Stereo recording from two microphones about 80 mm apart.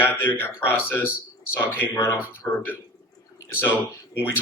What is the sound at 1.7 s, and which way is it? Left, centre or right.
Speech, left.